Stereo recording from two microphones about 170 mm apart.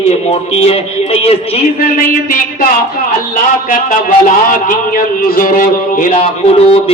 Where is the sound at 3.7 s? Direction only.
55° left (ahead or behind).